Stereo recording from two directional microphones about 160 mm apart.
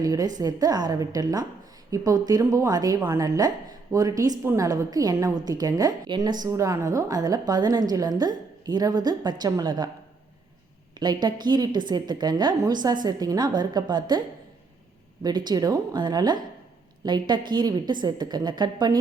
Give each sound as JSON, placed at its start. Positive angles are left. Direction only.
{"t": 0.0, "sound": "a woman's voice", "side_deg": -20}
{"t": 11.0, "sound": "a woman's voice", "side_deg": -25}
{"t": 15.2, "sound": "a woman's voice", "side_deg": -25}